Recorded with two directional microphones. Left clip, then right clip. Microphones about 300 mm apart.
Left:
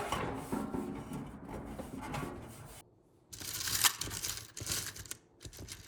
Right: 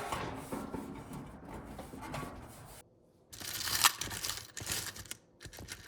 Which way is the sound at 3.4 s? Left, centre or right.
Right.